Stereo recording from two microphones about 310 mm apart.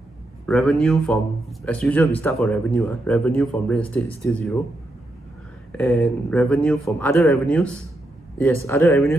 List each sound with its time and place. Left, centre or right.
0.5 s speech: centre
5.7 s speech: centre